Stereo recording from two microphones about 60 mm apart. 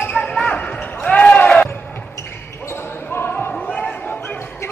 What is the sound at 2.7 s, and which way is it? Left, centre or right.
Basketball bounce, left.